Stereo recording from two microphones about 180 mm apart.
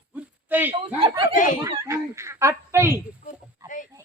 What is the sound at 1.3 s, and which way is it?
Speech, 45° left (ahead or behind).